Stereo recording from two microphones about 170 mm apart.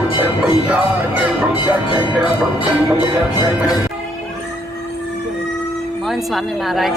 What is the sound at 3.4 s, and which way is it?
Speech, 20° left (ahead or behind).